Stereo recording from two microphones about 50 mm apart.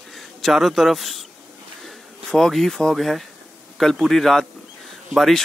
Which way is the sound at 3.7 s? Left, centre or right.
Centre.